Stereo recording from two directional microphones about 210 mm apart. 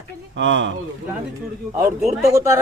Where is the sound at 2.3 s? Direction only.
15° right (ahead or behind).